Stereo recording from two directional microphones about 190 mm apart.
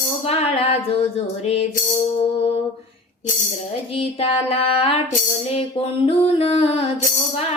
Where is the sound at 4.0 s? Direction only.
30° left (ahead or behind).